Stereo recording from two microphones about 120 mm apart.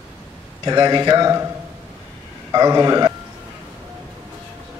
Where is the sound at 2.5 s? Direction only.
30° right (ahead or behind).